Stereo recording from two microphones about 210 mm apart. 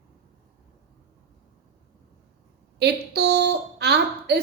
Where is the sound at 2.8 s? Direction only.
50° right (ahead or behind).